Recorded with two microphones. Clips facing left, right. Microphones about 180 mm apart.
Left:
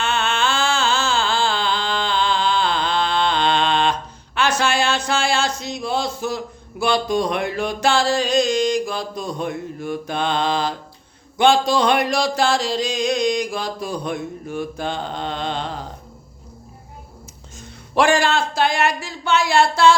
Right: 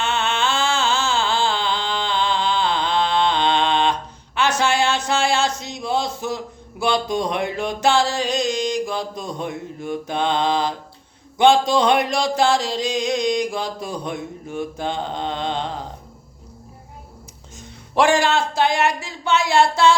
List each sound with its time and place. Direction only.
0.0 s a sound: 20° right (ahead or behind)
4.4 s speech: 20° right (ahead or behind)
17.6 s speech: 20° right (ahead or behind)